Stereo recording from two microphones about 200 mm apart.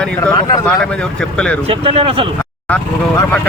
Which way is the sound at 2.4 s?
5° left (ahead or behind).